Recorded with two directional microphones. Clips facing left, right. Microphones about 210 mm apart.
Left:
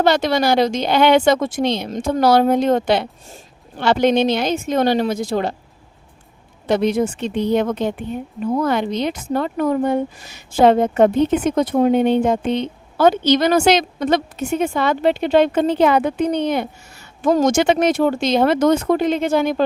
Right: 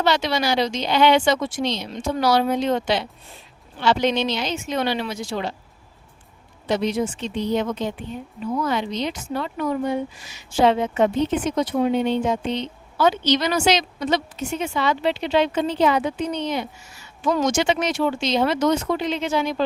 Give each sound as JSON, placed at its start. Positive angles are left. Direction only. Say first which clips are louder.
{"t": 0.0, "sound": "speech", "louder": "left 5 dB", "side_deg": 50}
{"t": 6.7, "sound": "a woman's voice", "louder": "left 5 dB", "side_deg": 55}